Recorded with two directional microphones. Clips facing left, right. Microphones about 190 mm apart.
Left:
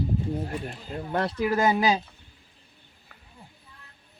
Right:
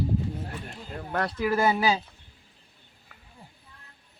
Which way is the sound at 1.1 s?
25° left (ahead or behind).